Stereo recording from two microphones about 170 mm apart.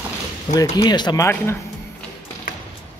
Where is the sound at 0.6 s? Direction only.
25° left (ahead or behind).